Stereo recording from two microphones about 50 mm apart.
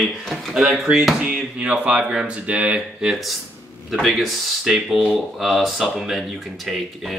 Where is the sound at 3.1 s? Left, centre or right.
Centre.